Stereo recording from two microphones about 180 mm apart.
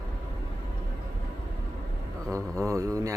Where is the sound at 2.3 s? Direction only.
15° right (ahead or behind).